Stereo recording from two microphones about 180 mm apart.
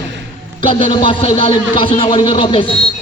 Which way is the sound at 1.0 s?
30° left (ahead or behind).